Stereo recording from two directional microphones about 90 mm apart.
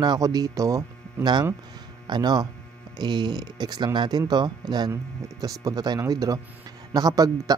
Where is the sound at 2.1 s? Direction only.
50° right (ahead or behind).